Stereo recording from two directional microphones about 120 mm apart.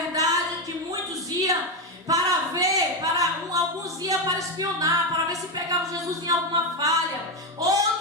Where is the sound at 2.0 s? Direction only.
30° right (ahead or behind).